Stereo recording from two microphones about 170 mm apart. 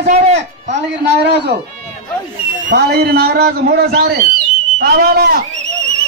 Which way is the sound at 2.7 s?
70° right (ahead or behind).